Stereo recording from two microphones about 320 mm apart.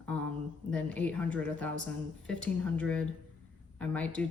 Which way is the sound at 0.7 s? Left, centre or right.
Centre.